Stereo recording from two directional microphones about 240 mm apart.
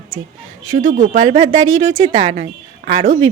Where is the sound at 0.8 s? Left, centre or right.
Right.